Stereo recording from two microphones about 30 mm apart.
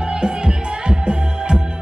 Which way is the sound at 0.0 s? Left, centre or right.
Right.